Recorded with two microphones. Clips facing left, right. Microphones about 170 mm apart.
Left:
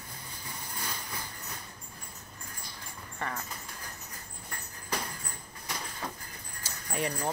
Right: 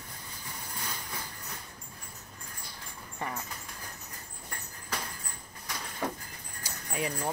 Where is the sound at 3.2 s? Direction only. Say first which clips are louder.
Even; 15° right (ahead or behind).